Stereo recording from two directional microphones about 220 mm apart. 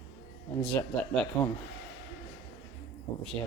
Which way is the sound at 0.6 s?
5° left (ahead or behind).